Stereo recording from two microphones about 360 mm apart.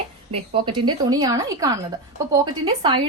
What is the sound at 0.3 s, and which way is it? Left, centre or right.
A woman's voice, centre.